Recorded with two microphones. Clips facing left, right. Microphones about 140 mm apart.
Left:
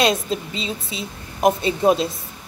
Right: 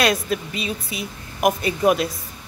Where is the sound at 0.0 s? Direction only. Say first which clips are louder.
Left 1 dB; 25° left (ahead or behind).